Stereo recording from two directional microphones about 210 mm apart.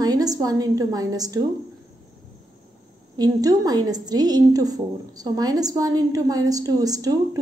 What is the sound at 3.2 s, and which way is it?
A woman's voice, 15° right (ahead or behind).